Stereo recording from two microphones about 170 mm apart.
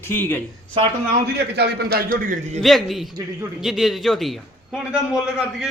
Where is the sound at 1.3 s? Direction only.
75° right (ahead or behind).